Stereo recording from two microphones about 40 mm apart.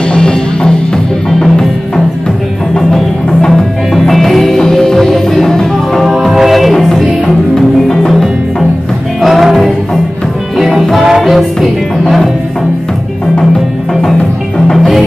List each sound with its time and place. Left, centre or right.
0.1 s music: centre
2.7 s music: centre
4.1 s music: centre
5.9 s music: centre
9.2 s music: centre